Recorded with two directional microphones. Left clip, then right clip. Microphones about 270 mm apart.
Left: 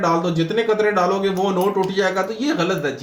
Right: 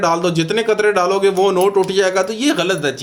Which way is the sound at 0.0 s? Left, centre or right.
Right.